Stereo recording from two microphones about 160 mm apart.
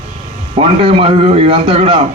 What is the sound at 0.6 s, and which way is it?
Speech, 35° right (ahead or behind).